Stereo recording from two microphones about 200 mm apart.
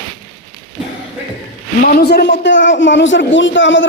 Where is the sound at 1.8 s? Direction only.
50° left (ahead or behind); by 3.9 s 70° left (ahead or behind).